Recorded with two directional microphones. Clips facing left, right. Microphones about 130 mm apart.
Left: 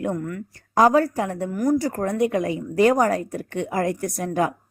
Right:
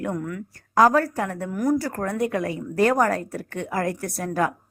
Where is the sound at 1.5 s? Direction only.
Centre (ahead or behind).